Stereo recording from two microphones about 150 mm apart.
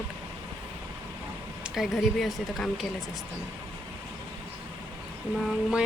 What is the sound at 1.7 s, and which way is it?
Speech, centre (ahead or behind).